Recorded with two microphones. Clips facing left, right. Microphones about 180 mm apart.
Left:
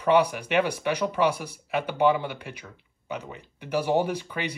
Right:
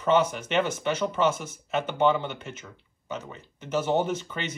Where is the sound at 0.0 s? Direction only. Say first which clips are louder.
Left 2 dB; 10° left (ahead or behind).